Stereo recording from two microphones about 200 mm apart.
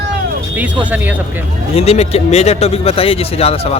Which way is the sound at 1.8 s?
30° left (ahead or behind).